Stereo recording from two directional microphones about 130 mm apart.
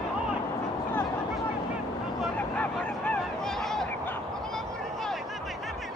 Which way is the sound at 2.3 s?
10° left (ahead or behind).